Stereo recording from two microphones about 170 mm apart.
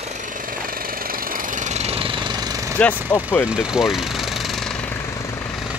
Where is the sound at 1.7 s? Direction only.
35° right (ahead or behind).